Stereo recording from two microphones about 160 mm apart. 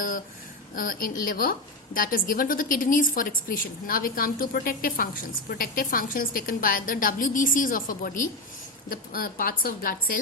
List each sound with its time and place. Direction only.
0.8 s a woman's voice: 60° left (ahead or behind)